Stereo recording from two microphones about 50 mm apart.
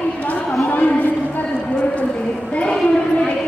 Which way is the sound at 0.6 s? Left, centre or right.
Left.